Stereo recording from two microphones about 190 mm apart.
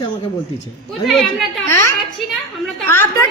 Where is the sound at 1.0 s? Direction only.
Centre (ahead or behind).